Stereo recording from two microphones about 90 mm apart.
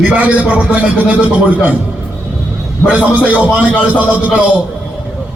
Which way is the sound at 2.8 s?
15° right (ahead or behind).